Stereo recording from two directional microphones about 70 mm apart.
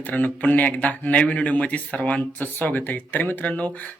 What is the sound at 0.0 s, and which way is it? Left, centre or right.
Speech, left.